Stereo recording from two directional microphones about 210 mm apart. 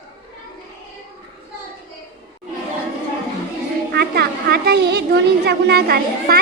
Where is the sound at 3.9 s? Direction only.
50° right (ahead or behind).